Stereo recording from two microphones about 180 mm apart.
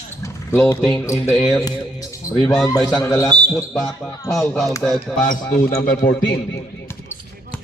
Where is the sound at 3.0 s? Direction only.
15° left (ahead or behind).